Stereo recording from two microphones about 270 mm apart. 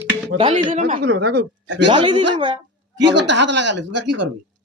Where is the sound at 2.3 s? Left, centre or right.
Centre.